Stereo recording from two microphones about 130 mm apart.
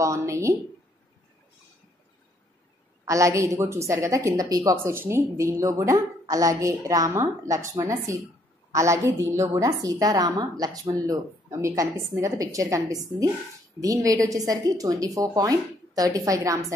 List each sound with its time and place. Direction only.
0.0 s a woman's voice: 25° right (ahead or behind)
3.1 s a woman's voice: 25° right (ahead or behind)